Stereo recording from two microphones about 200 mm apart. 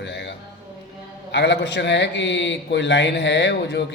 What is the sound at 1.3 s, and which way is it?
A man's voice, 60° left (ahead or behind).